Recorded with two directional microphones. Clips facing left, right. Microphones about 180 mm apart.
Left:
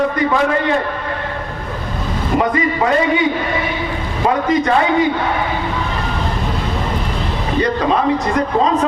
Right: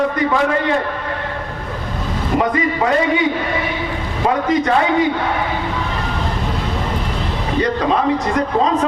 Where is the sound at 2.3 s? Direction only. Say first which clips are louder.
Left 1 dB; 25° left (ahead or behind).